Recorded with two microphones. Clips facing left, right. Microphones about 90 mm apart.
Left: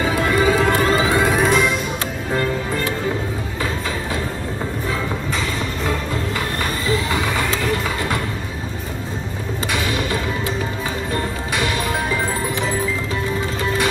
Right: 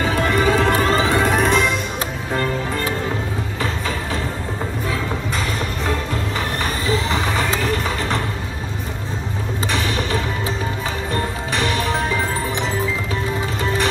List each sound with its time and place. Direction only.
0.0 s music: 10° left (ahead or behind)
6.9 s vehicle: 25° right (ahead or behind)
11.5 s music: 10° left (ahead or behind)